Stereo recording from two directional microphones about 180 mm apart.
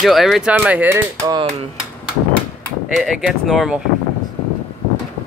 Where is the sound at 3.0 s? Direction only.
Centre (ahead or behind).